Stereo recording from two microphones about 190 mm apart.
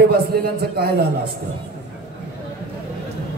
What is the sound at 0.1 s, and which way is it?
Speech, 55° right (ahead or behind).